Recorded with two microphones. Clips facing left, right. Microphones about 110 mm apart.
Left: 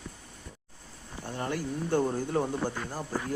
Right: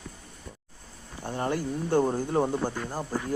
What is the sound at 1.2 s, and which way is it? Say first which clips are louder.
Speech: right 4 dB; 30° right (ahead or behind).